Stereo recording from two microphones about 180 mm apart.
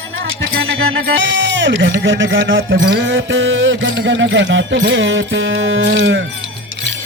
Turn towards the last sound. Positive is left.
turn(degrees=-85)